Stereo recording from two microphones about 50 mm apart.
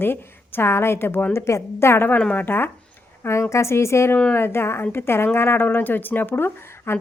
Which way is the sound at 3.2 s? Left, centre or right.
Left.